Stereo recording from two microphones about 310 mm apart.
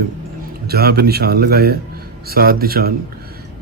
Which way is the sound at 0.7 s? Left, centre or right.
Right.